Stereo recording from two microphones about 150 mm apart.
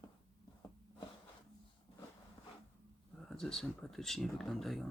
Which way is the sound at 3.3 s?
5° left (ahead or behind).